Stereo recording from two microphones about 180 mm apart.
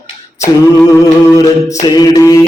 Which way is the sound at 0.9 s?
15° left (ahead or behind).